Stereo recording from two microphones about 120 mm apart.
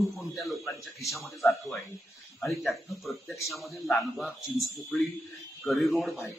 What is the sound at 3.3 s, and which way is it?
Speech, 25° left (ahead or behind).